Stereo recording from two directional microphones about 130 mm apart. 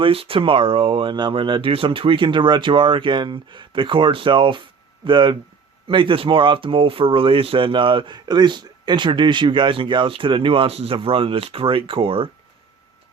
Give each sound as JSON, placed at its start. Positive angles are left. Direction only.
{"t": 0.0, "sound": "speech", "side_deg": -45}